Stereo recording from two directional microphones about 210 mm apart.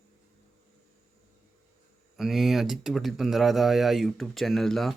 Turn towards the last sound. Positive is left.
turn(degrees=0)  # may be behind; listen again after turning